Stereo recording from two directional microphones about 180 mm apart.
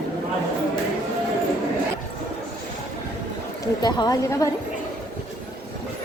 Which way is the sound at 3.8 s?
25° left (ahead or behind).